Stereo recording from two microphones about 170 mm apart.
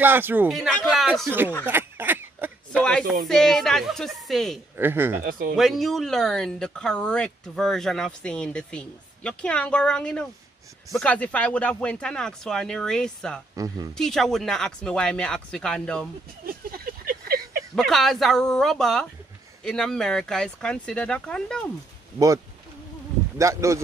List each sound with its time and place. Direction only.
0.0 s a man's voice: 10° right (ahead or behind)
0.5 s speech: centre (ahead or behind)
1.7 s a sound: 10° right (ahead or behind)
2.8 s speech: 5° left (ahead or behind)
4.7 s a man's voice: 10° right (ahead or behind)
5.6 s speech: centre (ahead or behind)
16.7 s a sound: 65° right (ahead or behind)
17.7 s speech: centre (ahead or behind)
23.3 s a man's voice: 15° right (ahead or behind)